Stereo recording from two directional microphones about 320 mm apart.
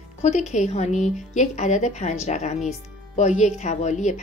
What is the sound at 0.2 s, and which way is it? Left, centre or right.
A woman's voice, left.